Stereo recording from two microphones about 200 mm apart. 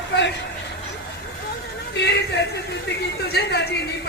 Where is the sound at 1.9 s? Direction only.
55° left (ahead or behind).